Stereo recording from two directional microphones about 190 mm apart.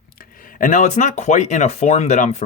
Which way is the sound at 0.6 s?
40° left (ahead or behind).